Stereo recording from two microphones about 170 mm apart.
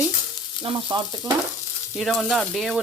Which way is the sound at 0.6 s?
25° right (ahead or behind).